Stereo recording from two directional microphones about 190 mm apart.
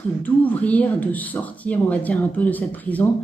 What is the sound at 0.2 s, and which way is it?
A woman's voice, 10° left (ahead or behind).